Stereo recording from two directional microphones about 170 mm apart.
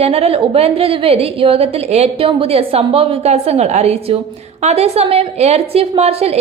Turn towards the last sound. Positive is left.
turn(degrees=-35)  # may be behind; listen again after turning